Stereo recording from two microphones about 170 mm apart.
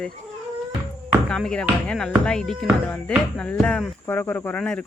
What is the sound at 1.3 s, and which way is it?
Speech, 5° left (ahead or behind).